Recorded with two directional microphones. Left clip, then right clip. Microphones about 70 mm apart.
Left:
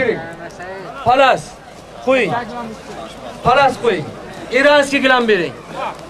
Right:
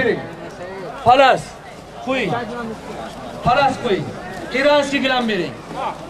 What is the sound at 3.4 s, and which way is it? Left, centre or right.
A man's voice, left.